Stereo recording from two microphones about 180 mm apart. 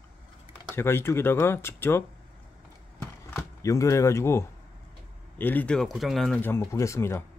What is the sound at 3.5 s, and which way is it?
Speech, 15° left (ahead or behind).